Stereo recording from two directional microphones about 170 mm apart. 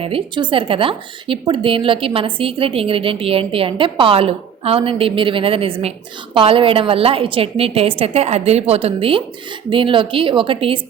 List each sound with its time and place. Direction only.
0.0 s a woman's voice: 30° right (ahead or behind)